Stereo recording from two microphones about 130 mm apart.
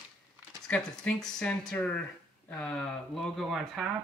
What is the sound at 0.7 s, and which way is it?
Speech, 10° left (ahead or behind).